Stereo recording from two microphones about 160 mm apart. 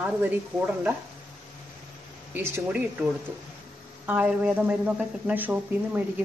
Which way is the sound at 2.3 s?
15° right (ahead or behind).